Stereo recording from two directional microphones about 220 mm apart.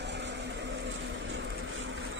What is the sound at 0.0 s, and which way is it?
Vehicle, 50° right (ahead or behind).